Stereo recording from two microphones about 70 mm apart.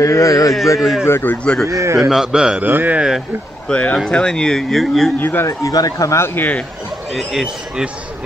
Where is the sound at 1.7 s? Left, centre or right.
Right.